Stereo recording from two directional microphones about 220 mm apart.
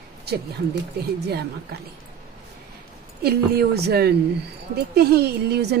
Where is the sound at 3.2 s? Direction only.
45° right (ahead or behind).